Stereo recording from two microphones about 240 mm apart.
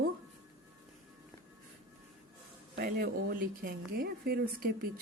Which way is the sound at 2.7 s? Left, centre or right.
Right.